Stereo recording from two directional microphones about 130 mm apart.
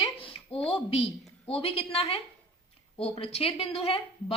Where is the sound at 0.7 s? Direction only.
45° left (ahead or behind).